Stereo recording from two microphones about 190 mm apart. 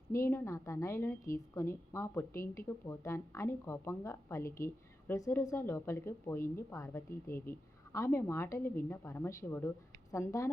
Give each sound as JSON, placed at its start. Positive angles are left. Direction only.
{"t": 0.1, "sound": "a woman's voice", "side_deg": 15}